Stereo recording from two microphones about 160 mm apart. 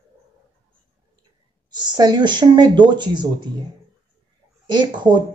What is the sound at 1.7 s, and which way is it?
A woman's voice, 25° right (ahead or behind).